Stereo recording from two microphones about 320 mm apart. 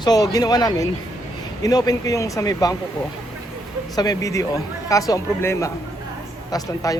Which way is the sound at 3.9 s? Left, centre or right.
Centre.